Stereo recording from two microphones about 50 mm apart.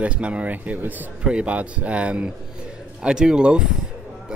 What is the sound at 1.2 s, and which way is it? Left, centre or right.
Speech, right.